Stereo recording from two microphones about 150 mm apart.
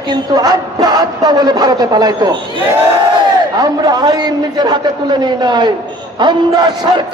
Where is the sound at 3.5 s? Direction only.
25° right (ahead or behind).